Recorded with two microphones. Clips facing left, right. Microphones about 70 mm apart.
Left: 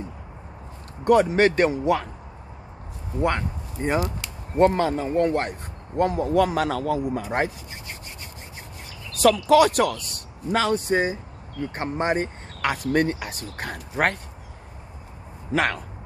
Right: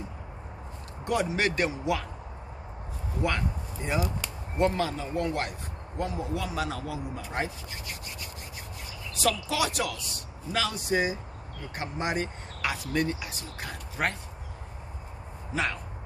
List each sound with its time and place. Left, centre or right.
1.2 s speech: left
3.2 s speech: left
5.9 s speech: left
9.1 s speech: left
15.5 s speech: left